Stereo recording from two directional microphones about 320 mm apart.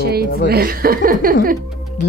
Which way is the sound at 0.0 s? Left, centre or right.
Right.